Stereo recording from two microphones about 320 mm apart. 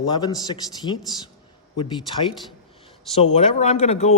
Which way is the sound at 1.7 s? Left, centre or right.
Centre.